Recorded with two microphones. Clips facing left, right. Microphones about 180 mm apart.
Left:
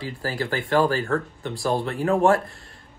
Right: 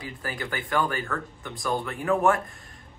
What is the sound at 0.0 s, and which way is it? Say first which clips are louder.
Speech: left 6 dB; 30° left (ahead or behind).